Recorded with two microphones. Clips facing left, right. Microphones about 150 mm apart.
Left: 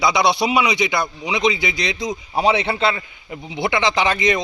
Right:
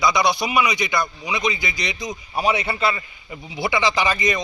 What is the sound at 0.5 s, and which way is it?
Speech, 20° left (ahead or behind).